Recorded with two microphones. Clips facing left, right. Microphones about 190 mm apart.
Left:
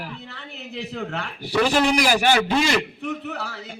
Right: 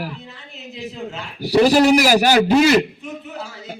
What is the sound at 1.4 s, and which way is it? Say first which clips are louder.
A man's voice: right 7 dB; 40° right (ahead or behind).